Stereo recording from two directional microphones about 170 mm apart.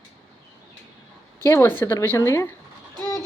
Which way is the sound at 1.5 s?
15° left (ahead or behind).